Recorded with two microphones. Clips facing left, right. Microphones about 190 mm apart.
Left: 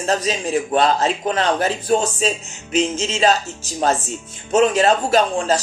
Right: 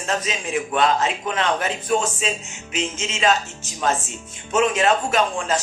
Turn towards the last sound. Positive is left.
turn(degrees=35)  # may be behind; listen again after turning